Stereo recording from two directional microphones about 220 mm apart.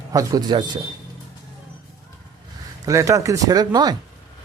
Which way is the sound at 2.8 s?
15° right (ahead or behind).